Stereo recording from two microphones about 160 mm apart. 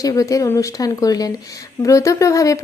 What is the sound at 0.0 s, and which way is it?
A woman's voice, 20° left (ahead or behind).